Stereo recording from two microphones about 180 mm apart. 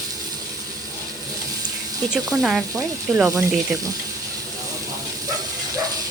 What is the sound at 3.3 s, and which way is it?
Speech, 15° right (ahead or behind).